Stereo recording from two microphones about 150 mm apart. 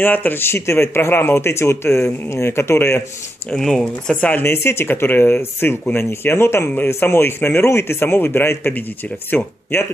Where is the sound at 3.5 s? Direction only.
5° left (ahead or behind).